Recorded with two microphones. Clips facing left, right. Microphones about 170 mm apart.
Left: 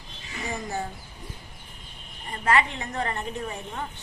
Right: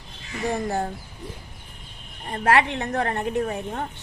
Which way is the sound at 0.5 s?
60° right (ahead or behind).